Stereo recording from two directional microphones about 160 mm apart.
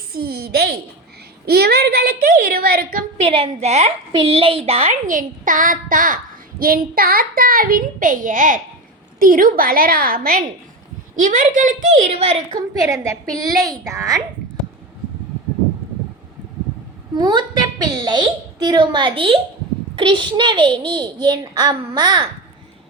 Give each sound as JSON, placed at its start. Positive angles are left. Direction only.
{"t": 0.1, "sound": "a woman's voice", "side_deg": -70}
{"t": 3.2, "sound": "a woman's voice", "side_deg": -35}
{"t": 4.1, "sound": "a woman's voice", "side_deg": -35}
{"t": 11.1, "sound": "a woman's voice", "side_deg": -55}
{"t": 12.7, "sound": "a child's voice", "side_deg": -25}
{"t": 17.2, "sound": "a child's voice", "side_deg": -25}